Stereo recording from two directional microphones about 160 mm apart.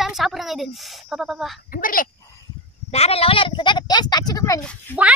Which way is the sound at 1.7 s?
60° left (ahead or behind).